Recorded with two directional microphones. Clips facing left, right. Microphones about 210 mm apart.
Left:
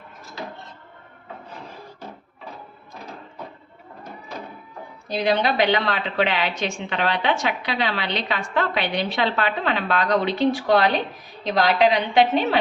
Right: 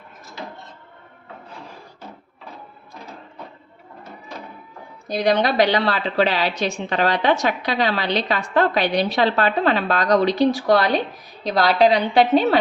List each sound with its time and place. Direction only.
5.0 s a woman's voice: 45° right (ahead or behind)